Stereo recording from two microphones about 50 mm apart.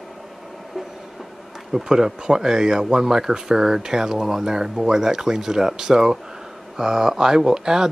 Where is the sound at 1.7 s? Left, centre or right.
Centre.